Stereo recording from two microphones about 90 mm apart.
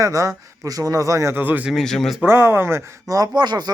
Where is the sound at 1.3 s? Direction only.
20° right (ahead or behind).